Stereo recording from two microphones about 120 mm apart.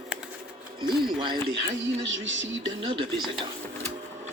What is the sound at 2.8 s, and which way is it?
Speech, 45° right (ahead or behind).